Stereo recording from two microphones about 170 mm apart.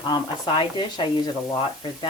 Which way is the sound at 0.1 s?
25° left (ahead or behind).